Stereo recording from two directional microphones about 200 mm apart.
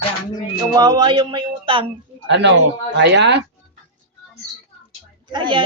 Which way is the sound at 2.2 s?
60° right (ahead or behind).